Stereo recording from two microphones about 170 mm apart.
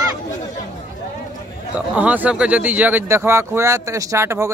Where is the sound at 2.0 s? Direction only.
10° right (ahead or behind).